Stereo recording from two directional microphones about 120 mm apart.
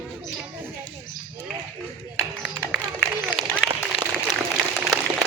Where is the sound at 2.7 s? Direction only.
5° right (ahead or behind).